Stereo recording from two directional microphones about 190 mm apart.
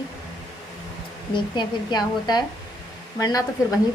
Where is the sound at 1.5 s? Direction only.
20° left (ahead or behind).